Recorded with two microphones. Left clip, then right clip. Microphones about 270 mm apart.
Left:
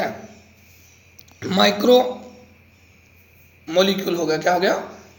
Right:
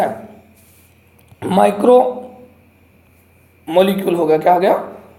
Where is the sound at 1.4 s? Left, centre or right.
Centre.